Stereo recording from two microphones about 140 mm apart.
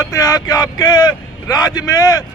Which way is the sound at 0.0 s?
25° left (ahead or behind).